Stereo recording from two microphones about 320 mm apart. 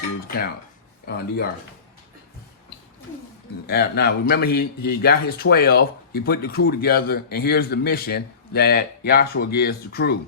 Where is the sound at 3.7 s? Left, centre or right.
Left.